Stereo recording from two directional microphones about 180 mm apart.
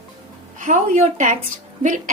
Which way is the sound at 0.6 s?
45° right (ahead or behind).